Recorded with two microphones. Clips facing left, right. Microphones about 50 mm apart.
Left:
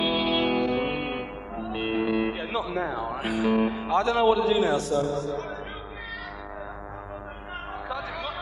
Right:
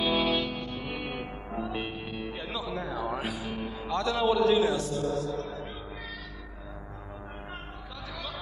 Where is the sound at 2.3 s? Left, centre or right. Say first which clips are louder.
Left 6 dB; left.